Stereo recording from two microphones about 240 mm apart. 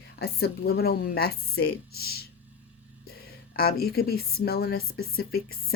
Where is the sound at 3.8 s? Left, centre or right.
Left.